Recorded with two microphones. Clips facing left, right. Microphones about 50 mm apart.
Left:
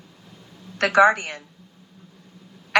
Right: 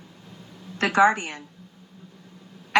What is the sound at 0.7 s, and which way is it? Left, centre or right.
Speech, left.